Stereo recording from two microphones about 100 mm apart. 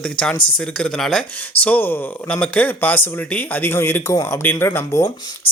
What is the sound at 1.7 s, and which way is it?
A man's voice, 20° left (ahead or behind).